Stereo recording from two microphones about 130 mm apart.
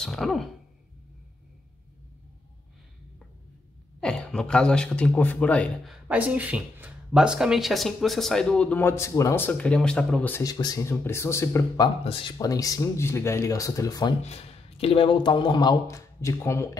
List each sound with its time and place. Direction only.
0.0 s speech: centre (ahead or behind)
4.0 s speech: 5° left (ahead or behind)
5.9 s speech: 10° right (ahead or behind); by 10.4 s 10° left (ahead or behind)
10.4 s speech: 30° left (ahead or behind)
12.0 s speech: 40° left (ahead or behind)
12.4 s speech: 25° left (ahead or behind)
14.2 s speech: 50° left (ahead or behind); by 16.7 s 20° left (ahead or behind)